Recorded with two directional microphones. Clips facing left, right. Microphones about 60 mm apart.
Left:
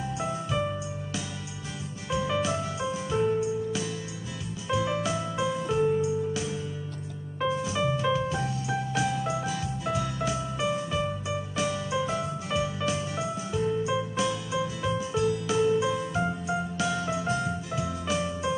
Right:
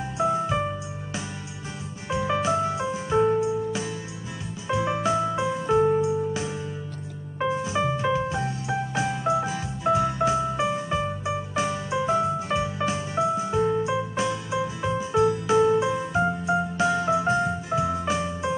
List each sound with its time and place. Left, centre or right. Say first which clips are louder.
2.0 s music: right 3 dB; right